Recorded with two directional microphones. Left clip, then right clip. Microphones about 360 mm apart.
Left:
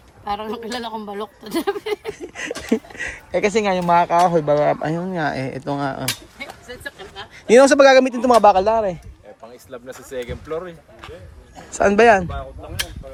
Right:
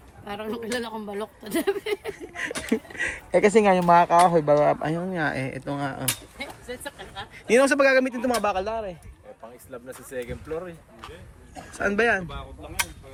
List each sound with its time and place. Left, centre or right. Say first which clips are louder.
0.3 s speech: left 5 dB; centre
7.4 s speech: left 8 dB; centre
11.7 s speech: left 10 dB; centre